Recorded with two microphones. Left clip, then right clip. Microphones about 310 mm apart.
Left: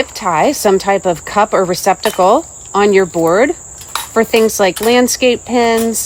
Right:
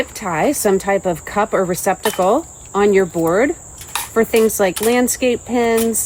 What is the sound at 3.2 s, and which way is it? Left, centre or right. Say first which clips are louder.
Speech: left 4 dB; left.